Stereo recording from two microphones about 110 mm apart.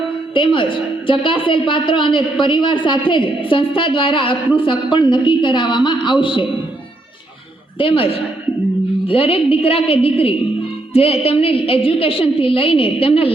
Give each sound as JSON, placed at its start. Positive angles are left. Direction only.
{"t": 0.3, "sound": "a man's voice", "side_deg": 50}
{"t": 7.8, "sound": "a woman's voice", "side_deg": 55}